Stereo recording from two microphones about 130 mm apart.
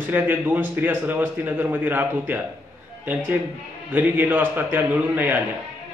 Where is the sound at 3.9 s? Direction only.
15° right (ahead or behind).